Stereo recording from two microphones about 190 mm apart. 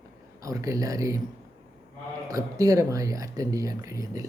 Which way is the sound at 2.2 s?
20° right (ahead or behind).